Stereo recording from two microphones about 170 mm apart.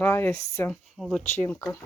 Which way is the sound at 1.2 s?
15° left (ahead or behind).